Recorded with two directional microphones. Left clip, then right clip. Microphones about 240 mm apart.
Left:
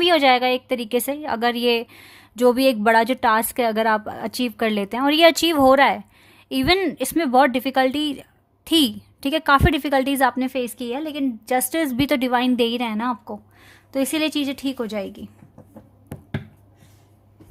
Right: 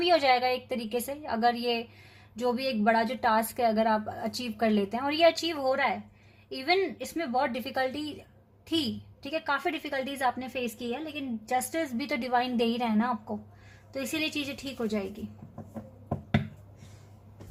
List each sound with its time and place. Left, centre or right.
0.0 s speech: left
1.4 s a woman's voice: left
2.6 s speech: left
9.2 s a woman's voice: left
13.9 s a woman's voice: left